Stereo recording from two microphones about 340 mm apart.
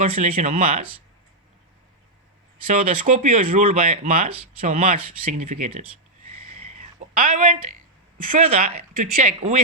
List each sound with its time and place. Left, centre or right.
0.0 s speech: centre
2.6 s speech: right
6.5 s a sound: centre
8.3 s speech: right